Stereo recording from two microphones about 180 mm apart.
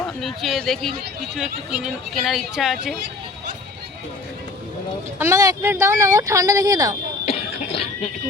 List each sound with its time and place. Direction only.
0.2 s speech: centre (ahead or behind)
5.2 s speech: 20° right (ahead or behind)